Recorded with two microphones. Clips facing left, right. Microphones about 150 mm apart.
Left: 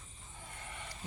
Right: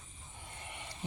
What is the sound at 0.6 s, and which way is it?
Vehicle, 20° right (ahead or behind).